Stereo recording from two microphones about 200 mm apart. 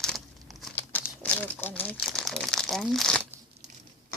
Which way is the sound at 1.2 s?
10° left (ahead or behind).